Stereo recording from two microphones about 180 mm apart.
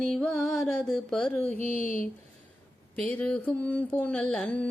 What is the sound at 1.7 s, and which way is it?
Speech, 45° left (ahead or behind).